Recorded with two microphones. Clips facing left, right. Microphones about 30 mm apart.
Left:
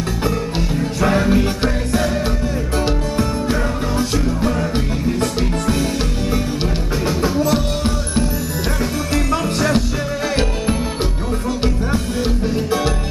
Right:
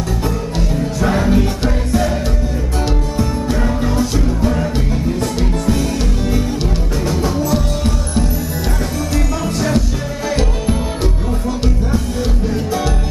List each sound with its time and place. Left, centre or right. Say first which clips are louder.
0.6 s music: right 1 dB; centre
1.3 s music: right 1 dB; centre
4.7 s music: even; centre
7.1 s music: even; centre